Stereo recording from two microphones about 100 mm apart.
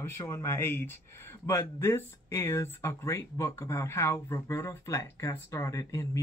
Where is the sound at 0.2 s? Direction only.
25° left (ahead or behind).